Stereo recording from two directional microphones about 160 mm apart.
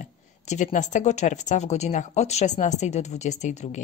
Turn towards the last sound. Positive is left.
turn(degrees=45)  # may be behind; listen again after turning